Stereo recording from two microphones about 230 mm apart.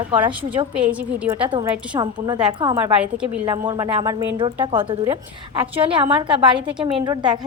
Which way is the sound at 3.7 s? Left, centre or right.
Centre.